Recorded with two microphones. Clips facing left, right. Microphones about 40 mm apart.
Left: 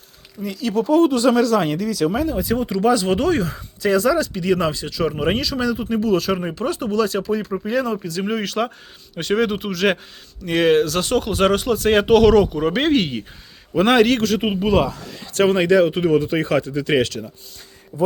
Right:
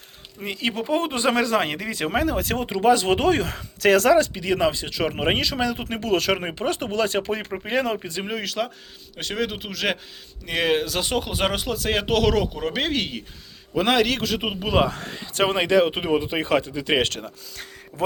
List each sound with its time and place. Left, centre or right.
0.4 s speech: right
0.7 s speech: centre; by 2.2 s right
2.2 s speech: right
2.6 s speech: right
3.5 s speech: right
4.3 s speech: centre
4.7 s speech: right
6.4 s speech: right
8.3 s speech: centre
14.8 s speech: right
15.2 s speech: centre
17.0 s speech: right
17.9 s speech: right